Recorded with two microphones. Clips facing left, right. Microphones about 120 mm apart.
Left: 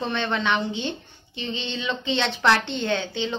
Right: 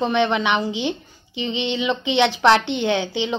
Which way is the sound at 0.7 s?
85° right.